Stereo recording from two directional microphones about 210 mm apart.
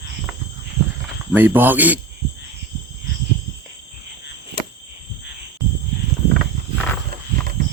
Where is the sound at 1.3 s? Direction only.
10° right (ahead or behind).